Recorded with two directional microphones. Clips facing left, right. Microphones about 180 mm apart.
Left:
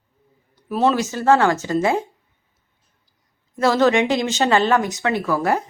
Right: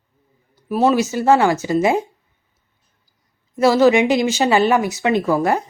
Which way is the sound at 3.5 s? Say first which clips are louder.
Right 3 dB; 15° right (ahead or behind).